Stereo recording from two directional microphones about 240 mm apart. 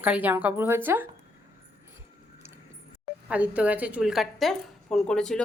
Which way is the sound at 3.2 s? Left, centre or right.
Centre.